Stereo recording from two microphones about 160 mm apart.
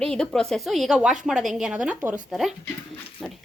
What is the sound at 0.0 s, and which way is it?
Speech, 5° left (ahead or behind).